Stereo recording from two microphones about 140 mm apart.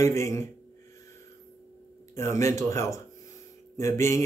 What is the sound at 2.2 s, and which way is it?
Speech, 20° left (ahead or behind).